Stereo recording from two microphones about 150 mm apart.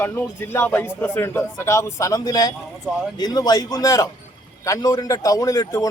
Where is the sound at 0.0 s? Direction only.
15° left (ahead or behind).